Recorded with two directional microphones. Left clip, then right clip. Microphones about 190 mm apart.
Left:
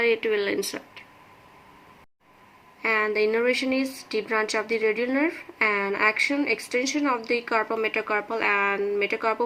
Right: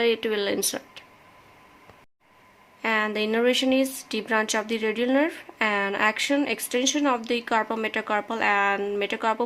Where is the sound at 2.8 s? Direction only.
65° right (ahead or behind).